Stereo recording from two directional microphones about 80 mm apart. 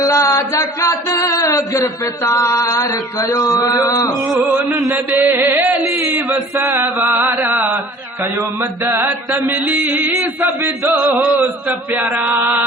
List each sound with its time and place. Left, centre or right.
0.0 s music: left
4.9 s chant: right